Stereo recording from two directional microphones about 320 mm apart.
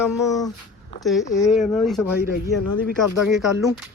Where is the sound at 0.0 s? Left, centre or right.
Centre.